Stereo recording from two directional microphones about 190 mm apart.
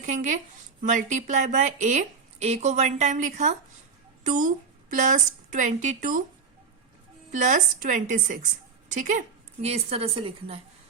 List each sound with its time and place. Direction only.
0.0 s a woman's voice: 40° right (ahead or behind)
7.3 s a woman's voice: 40° right (ahead or behind)